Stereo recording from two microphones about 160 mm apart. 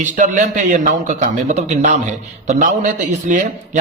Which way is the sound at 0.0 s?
50° right (ahead or behind).